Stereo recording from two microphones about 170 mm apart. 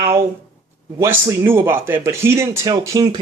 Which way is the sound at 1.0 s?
15° right (ahead or behind).